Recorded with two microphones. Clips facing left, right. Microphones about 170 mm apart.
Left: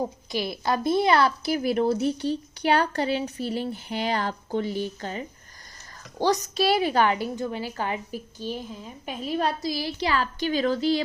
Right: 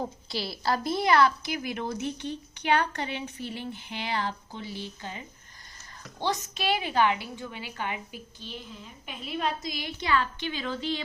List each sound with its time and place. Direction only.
0.3 s a woman's voice: 20° left (ahead or behind); by 5.2 s 50° left (ahead or behind)
6.1 s a woman's voice: 40° left (ahead or behind)